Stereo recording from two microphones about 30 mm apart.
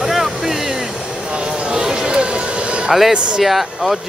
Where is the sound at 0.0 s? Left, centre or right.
Centre.